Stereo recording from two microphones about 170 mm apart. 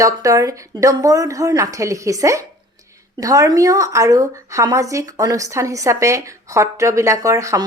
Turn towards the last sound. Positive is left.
turn(degrees=-20)  # may be behind; listen again after turning